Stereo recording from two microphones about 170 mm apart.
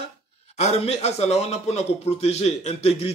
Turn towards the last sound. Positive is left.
turn(degrees=35)  # may be behind; listen again after turning